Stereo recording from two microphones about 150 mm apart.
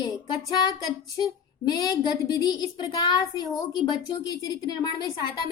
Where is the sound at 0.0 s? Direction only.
25° left (ahead or behind).